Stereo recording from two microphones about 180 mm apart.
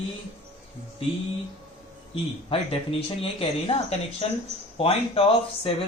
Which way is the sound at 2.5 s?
30° left (ahead or behind).